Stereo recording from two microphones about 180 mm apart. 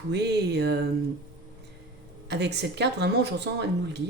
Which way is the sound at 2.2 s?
70° right (ahead or behind).